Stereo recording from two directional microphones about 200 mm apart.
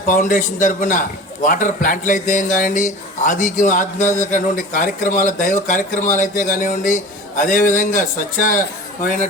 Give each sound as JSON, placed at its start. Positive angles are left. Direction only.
{"t": 0.1, "sound": "a man's voice", "side_deg": 40}